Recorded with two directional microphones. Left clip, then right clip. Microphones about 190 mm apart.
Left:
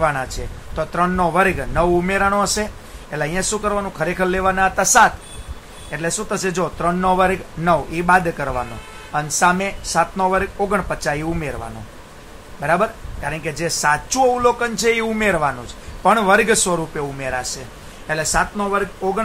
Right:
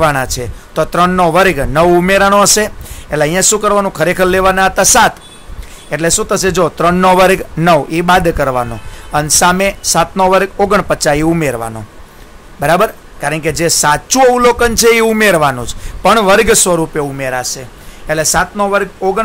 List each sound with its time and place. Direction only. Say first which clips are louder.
0.0 s speech: right 8 dB; 55° right (ahead or behind)